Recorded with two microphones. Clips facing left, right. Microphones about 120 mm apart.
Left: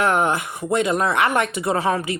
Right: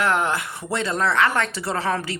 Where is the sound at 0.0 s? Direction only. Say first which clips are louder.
Left 3 dB; 20° left (ahead or behind).